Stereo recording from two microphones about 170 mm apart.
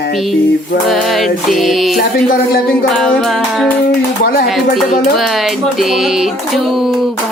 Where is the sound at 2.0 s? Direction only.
65° left (ahead or behind).